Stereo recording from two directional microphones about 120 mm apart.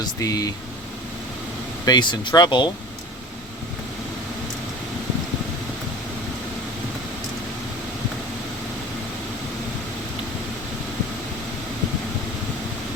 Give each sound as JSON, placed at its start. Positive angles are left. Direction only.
{"t": 0.0, "sound": "speech", "side_deg": 30}
{"t": 1.8, "sound": "speech", "side_deg": 35}